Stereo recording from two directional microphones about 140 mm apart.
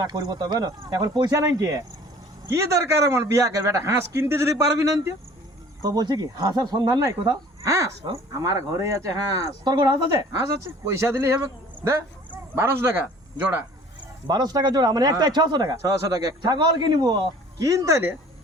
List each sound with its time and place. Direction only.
0.0 s speech: 30° right (ahead or behind)
14.3 s speech: 30° right (ahead or behind)